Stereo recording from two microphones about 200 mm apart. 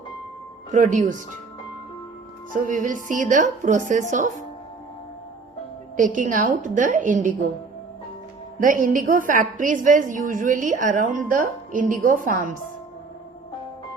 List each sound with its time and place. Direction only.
0.7 s a woman's voice: 40° right (ahead or behind)
2.6 s a woman's voice: 40° right (ahead or behind)
6.0 s a woman's voice: 40° right (ahead or behind)
8.5 s a woman's voice: 40° right (ahead or behind)